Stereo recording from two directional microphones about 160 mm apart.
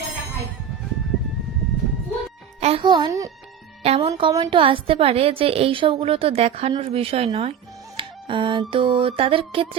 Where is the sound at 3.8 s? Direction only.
40° right (ahead or behind).